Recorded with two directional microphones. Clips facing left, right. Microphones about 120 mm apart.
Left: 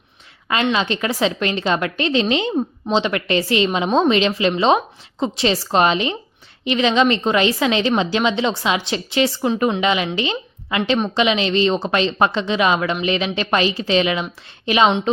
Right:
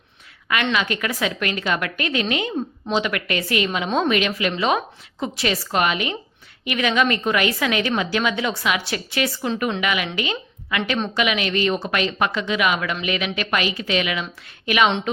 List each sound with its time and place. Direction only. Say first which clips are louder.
0.6 s a woman's voice: left 4 dB; 25° left (ahead or behind)